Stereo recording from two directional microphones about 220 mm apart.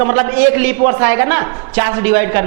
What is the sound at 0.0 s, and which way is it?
A man's voice, 15° right (ahead or behind).